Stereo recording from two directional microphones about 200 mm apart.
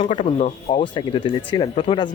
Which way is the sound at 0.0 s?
30° left (ahead or behind).